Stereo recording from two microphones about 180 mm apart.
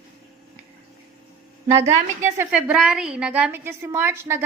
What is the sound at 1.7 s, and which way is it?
Speech, 15° right (ahead or behind).